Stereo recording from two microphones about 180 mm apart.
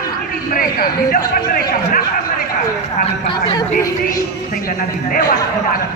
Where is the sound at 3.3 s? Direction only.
25° left (ahead or behind).